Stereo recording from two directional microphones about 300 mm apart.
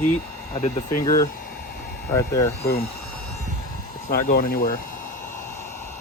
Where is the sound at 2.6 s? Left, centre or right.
Left.